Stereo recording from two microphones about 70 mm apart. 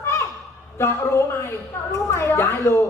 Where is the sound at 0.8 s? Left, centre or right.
Left.